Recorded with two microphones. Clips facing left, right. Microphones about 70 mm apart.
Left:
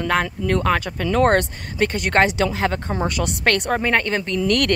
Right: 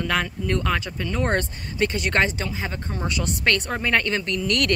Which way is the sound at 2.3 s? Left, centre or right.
Left.